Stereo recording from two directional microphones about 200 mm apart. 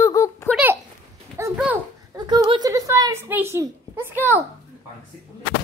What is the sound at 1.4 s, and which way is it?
Babbling, 15° right (ahead or behind).